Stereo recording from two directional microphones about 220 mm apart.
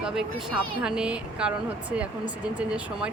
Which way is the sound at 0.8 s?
5° right (ahead or behind).